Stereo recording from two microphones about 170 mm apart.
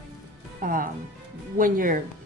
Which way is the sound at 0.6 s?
55° right (ahead or behind).